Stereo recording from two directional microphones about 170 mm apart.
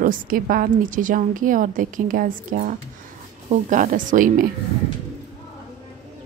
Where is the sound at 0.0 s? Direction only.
55° right (ahead or behind).